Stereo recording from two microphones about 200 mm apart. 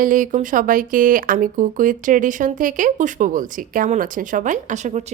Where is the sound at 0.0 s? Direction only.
40° right (ahead or behind).